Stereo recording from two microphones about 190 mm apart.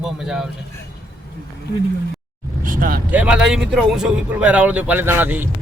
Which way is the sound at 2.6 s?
45° right (ahead or behind).